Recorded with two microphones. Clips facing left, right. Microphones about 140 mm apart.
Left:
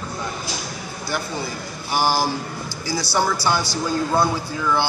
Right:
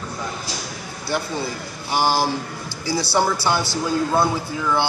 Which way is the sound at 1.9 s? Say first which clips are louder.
Right 1 dB; 25° right (ahead or behind).